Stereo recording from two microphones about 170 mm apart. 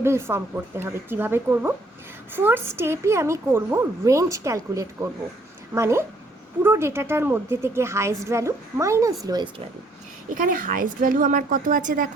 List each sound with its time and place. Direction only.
0.0 s a woman's voice: 15° right (ahead or behind)
10.2 s a woman's voice: 50° right (ahead or behind)